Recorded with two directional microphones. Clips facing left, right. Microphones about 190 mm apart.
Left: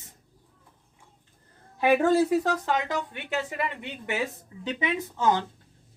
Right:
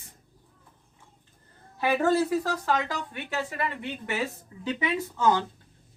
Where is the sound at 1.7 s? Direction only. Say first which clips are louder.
Left 3 dB; 15° left (ahead or behind).